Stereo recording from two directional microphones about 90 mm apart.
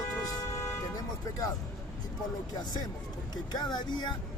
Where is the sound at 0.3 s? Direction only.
35° left (ahead or behind).